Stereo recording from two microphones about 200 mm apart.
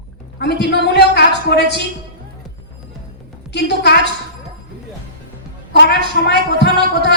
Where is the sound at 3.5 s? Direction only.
55° left (ahead or behind).